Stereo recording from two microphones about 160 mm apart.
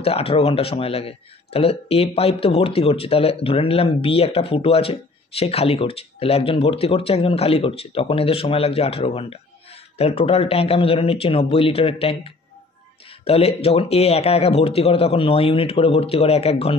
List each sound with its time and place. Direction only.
0.0 s speech: 40° left (ahead or behind)